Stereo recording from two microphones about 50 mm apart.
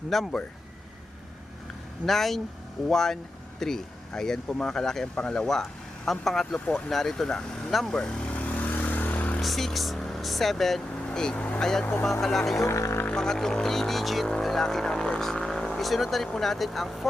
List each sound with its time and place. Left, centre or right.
0.1 s speech: centre
2.0 s speech: centre
6.9 s speech: centre
7.9 s speech: centre
8.2 s vehicle: left
9.4 s speech: centre
11.3 s speech: left
11.6 s speech: centre
12.5 s speech: left
13.1 s speech: centre